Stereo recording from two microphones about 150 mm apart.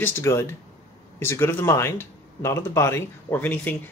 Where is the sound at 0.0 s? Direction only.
20° left (ahead or behind).